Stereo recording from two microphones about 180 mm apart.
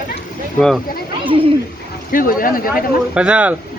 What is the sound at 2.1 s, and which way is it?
Speech, 50° left (ahead or behind).